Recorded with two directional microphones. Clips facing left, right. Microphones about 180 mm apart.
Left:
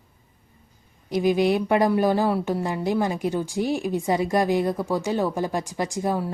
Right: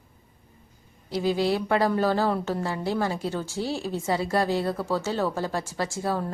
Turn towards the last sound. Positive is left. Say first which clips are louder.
# left 3 dB
turn(degrees=15)  # may be behind; listen again after turning